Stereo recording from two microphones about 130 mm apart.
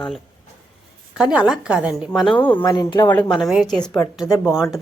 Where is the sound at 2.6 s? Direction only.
30° left (ahead or behind).